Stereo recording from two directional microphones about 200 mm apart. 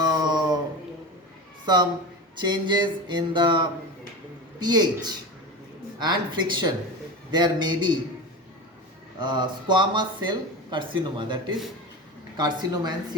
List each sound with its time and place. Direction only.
0.0 s dog: 20° right (ahead or behind)
1.6 s a woman's voice: 20° right (ahead or behind)
9.1 s speech: 20° right (ahead or behind)